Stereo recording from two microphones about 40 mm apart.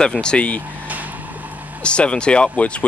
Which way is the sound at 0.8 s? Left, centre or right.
Right.